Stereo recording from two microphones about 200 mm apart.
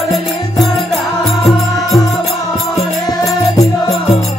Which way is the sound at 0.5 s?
Centre (ahead or behind).